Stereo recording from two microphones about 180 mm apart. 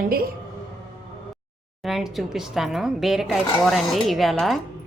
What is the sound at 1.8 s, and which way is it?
Speech, centre (ahead or behind).